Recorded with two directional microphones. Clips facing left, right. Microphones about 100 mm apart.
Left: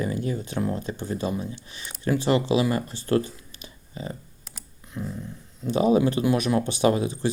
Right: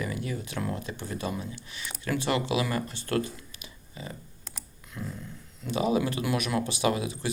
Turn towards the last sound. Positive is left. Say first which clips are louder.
# left 6 dB
turn(degrees=35)  # may be behind; listen again after turning